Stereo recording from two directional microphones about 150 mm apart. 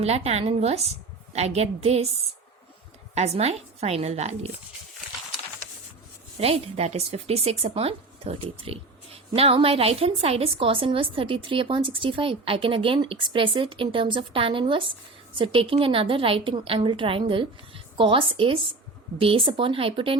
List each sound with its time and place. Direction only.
0.0 s a woman's voice: 45° right (ahead or behind)
3.2 s a woman's voice: 45° right (ahead or behind)
6.4 s speech: 40° right (ahead or behind)